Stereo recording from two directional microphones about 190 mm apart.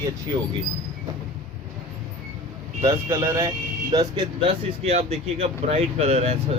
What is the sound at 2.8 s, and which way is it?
Speech, 15° right (ahead or behind).